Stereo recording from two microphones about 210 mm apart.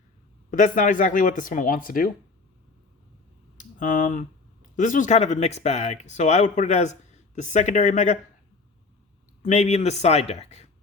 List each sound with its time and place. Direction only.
0.6 s speech: 40° left (ahead or behind)
3.6 s speech: 40° left (ahead or behind)
9.4 s speech: 30° left (ahead or behind)